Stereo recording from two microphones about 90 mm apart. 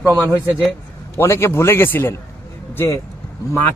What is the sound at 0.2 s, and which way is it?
A man's voice, 25° left (ahead or behind).